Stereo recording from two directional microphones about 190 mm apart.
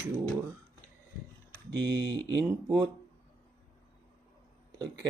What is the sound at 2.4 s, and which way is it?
Speech, 20° right (ahead or behind).